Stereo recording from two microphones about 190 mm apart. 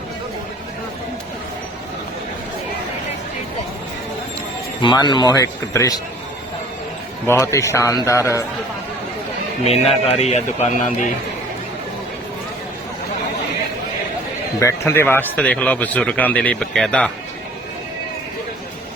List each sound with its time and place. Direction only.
4.8 s speech: 25° left (ahead or behind)
7.3 s a man's voice: 15° left (ahead or behind)
9.6 s speech: 30° left (ahead or behind)
14.6 s a man's voice: 15° left (ahead or behind)